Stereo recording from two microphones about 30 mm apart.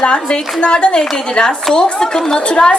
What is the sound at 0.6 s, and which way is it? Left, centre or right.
A woman's voice, left.